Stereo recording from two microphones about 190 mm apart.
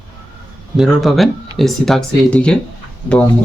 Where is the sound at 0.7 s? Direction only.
Centre (ahead or behind).